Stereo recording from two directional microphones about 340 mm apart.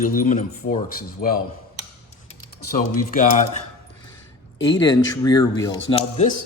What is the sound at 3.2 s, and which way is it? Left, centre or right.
Speech, left.